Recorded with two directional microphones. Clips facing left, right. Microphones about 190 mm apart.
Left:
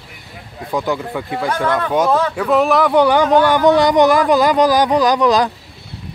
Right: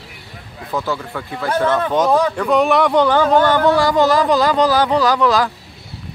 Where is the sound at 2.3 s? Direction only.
5° left (ahead or behind).